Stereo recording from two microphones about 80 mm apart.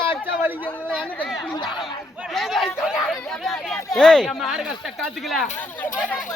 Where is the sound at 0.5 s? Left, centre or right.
Left.